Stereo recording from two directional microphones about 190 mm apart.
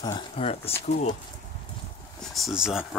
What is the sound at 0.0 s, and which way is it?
Speech, 25° left (ahead or behind).